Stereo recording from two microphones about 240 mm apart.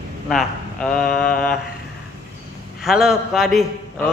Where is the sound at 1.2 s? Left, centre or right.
Centre.